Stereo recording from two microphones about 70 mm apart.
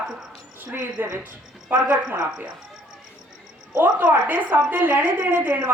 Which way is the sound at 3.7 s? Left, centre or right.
Right.